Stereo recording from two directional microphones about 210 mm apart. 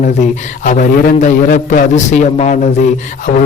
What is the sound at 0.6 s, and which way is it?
A man's voice, 40° left (ahead or behind).